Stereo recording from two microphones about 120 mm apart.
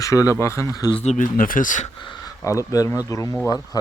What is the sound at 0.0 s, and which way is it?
Speech, 25° left (ahead or behind).